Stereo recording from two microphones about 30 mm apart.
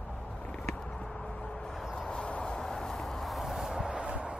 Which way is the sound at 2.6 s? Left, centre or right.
Centre.